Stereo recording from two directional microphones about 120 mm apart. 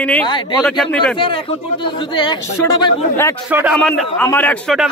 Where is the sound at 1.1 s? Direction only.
45° left (ahead or behind).